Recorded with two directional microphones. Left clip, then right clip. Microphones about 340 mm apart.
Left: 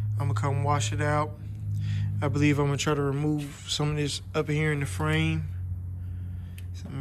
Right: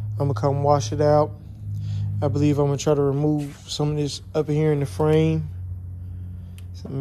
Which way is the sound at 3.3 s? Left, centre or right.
Centre.